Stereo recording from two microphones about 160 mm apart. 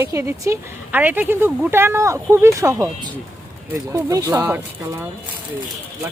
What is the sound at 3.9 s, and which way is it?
Speech, 20° right (ahead or behind).